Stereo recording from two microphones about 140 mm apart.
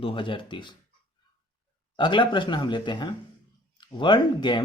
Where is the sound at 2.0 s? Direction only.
35° left (ahead or behind).